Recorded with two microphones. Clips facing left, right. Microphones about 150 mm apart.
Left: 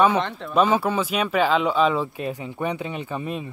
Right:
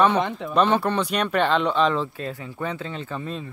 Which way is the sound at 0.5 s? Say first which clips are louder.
Left 1 dB; 5° left (ahead or behind).